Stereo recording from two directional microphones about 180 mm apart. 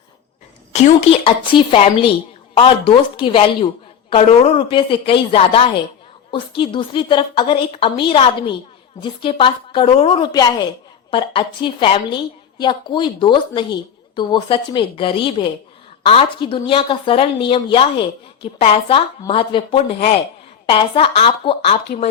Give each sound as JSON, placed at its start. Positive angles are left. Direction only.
{"t": 0.7, "sound": "a woman's voice", "side_deg": 35}
{"t": 21.9, "sound": "speech", "side_deg": 50}